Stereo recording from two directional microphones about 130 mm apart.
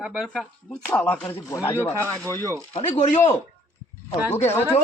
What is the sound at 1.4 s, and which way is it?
Speech, 25° left (ahead or behind).